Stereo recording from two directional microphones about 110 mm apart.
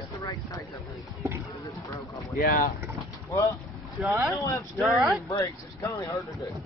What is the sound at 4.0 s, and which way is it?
Speech, 15° right (ahead or behind).